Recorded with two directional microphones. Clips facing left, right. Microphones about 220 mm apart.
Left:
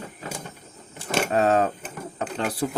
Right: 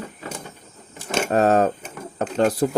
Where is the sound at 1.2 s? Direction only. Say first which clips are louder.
Right 3 dB; 45° right (ahead or behind).